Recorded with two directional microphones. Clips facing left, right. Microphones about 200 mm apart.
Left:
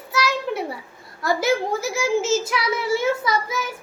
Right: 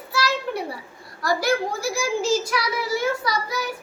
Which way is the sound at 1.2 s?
20° left (ahead or behind).